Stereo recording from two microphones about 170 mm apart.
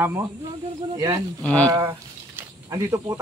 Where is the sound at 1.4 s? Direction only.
5° left (ahead or behind).